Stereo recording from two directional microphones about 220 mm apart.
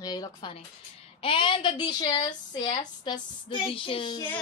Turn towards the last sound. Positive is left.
turn(degrees=25)  # may be behind; listen again after turning